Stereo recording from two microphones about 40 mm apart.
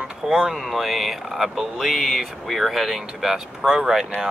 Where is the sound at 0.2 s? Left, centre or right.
Centre.